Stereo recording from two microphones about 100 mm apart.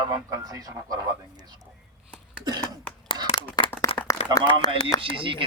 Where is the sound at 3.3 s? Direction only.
55° left (ahead or behind).